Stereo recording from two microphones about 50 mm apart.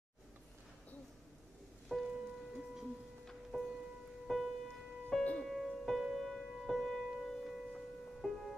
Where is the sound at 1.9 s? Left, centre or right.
Centre.